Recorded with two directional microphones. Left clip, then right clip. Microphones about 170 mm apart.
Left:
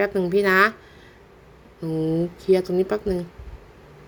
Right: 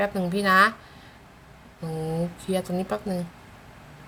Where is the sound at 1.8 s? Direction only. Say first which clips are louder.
Left 6 dB; 25° left (ahead or behind).